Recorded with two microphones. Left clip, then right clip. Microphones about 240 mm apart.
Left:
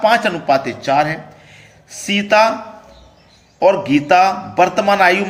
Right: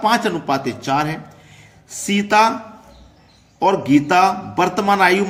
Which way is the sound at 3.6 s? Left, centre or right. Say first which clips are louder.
Left 2 dB; centre.